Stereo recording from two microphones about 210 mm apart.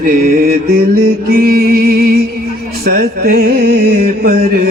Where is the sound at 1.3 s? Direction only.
45° right (ahead or behind).